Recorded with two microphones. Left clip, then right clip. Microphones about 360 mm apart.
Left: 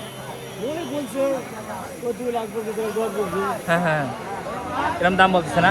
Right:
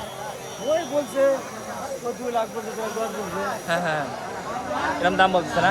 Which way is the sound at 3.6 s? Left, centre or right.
Centre.